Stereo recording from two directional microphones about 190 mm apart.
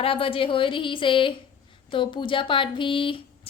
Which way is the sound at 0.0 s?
30° left (ahead or behind).